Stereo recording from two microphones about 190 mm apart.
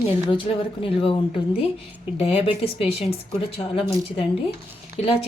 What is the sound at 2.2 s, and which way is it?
A woman's voice, 30° left (ahead or behind).